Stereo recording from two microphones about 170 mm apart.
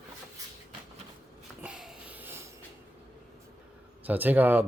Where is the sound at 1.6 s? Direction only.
5° right (ahead or behind).